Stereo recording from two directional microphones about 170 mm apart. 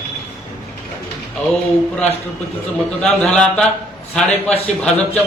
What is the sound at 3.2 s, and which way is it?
A man's voice, 5° left (ahead or behind).